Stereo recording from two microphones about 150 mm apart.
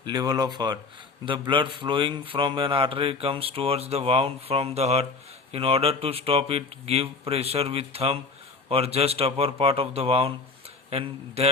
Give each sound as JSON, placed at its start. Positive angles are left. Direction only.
{"t": 0.0, "sound": "a man's voice", "side_deg": -30}